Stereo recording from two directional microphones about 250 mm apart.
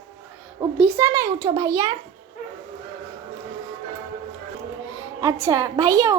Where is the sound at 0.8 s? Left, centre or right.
Centre.